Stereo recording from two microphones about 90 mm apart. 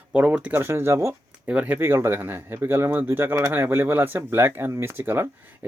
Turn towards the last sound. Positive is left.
turn(degrees=-25)  # may be behind; listen again after turning